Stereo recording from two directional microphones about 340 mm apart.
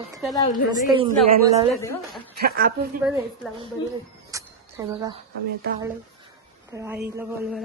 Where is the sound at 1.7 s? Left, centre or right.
Centre.